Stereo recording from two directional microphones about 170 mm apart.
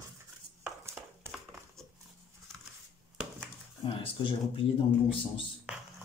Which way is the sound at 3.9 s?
30° left (ahead or behind).